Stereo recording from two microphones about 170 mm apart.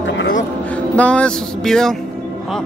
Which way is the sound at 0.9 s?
5° left (ahead or behind).